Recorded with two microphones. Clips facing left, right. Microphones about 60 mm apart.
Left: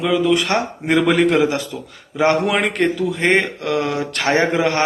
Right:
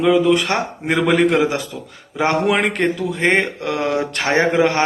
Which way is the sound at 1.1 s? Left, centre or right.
Right.